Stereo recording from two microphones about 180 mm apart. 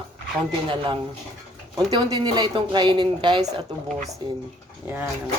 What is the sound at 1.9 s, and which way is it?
Speech, 25° right (ahead or behind).